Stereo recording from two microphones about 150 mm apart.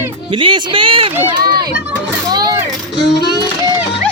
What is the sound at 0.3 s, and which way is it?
Speech, 35° right (ahead or behind).